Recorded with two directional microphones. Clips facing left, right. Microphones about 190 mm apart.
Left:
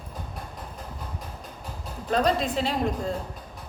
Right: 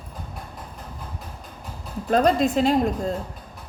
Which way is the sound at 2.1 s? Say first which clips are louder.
Right 5 dB; 50° right (ahead or behind).